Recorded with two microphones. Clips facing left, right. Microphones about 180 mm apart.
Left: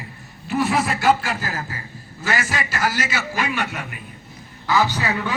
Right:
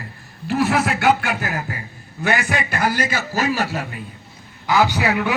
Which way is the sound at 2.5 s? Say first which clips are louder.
Right 3 dB; 60° right (ahead or behind).